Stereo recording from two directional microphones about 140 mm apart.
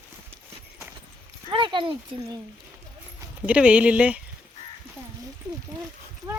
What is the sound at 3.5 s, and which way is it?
Speech, 10° right (ahead or behind).